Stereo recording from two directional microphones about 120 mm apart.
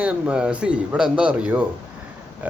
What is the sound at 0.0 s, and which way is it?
Speech, 10° right (ahead or behind).